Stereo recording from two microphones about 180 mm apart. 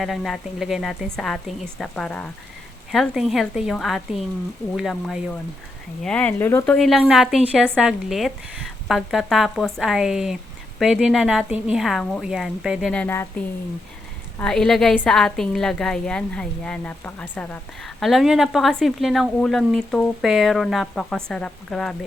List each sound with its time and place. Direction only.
0.0 s a woman's voice: centre (ahead or behind)
6.7 s a woman's voice: centre (ahead or behind)
14.3 s a woman's voice: 5° left (ahead or behind)